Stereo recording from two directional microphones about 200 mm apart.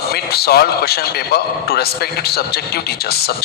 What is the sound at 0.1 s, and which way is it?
A man's voice, 50° left (ahead or behind).